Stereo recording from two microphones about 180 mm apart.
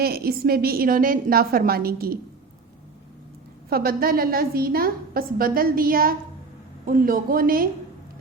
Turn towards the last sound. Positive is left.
turn(degrees=-50)  # may be behind; listen again after turning